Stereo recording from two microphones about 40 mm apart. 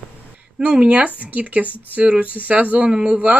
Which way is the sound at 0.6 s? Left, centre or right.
Right.